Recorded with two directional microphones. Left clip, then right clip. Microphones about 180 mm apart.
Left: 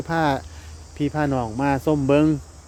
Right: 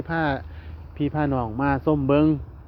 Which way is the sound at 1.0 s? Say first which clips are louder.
Left 2 dB; 35° left (ahead or behind).